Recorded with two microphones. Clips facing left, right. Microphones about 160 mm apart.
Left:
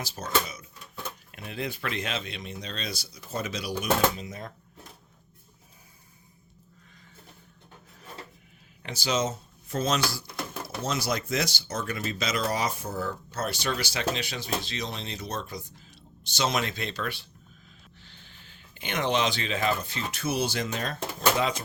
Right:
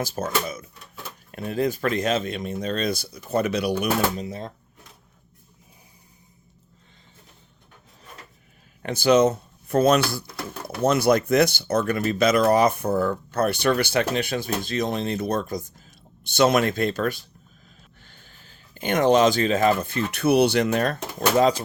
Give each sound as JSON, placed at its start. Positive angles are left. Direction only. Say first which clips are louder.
{"t": 0.0, "sound": "speech", "louder": "right 4 dB", "side_deg": -50}
{"t": 4.2, "sound": "speech", "louder": "right 6 dB", "side_deg": -30}
{"t": 8.8, "sound": "speech", "louder": "right 11 dB", "side_deg": -55}
{"t": 16.2, "sound": "speech", "louder": "right 9 dB", "side_deg": -55}
{"t": 18.0, "sound": "a sound", "louder": "right 1 dB", "side_deg": -45}
{"t": 20.1, "sound": "speech", "louder": "right 11 dB", "side_deg": -65}
{"t": 21.2, "sound": "speech", "louder": "right 7 dB", "side_deg": -40}